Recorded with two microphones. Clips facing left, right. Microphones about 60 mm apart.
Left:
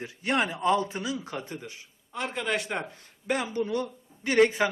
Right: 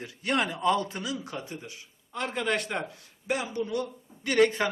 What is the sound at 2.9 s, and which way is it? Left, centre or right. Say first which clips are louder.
Speech: left 1 dB; left.